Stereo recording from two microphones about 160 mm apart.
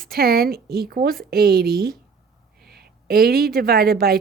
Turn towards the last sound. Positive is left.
turn(degrees=-70)  # may be behind; listen again after turning